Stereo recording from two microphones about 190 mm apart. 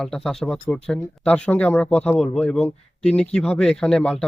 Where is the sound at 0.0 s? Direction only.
5° left (ahead or behind).